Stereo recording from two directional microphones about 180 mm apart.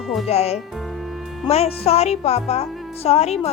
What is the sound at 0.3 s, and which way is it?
A woman's voice, 35° left (ahead or behind).